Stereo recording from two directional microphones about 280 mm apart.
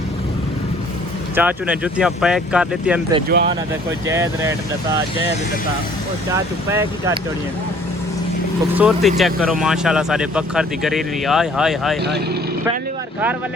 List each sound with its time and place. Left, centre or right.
1.4 s speech: centre
3.3 s speech: right
4.0 s speech: centre
6.3 s speech: centre
8.7 s speech: centre
12.0 s speech: right